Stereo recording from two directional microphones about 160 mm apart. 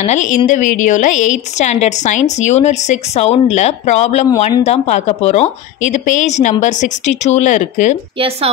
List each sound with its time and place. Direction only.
0.0 s a woman's voice: 45° left (ahead or behind)